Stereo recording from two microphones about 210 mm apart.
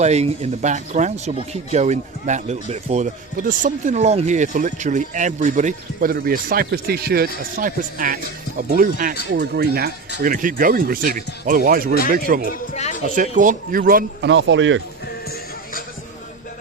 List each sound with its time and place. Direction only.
0.0 s speech: 30° right (ahead or behind)
12.7 s a sound: 35° left (ahead or behind)
13.1 s speech: 35° right (ahead or behind)
14.3 s speech: 60° right (ahead or behind)